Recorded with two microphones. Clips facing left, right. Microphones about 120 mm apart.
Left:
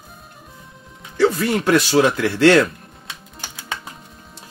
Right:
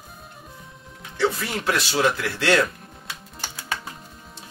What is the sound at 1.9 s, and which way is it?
Speech, 50° left (ahead or behind).